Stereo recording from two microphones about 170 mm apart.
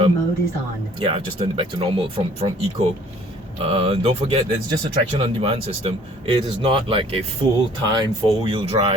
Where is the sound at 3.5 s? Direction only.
35° right (ahead or behind).